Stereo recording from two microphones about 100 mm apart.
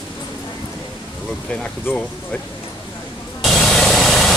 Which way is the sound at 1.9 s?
20° left (ahead or behind).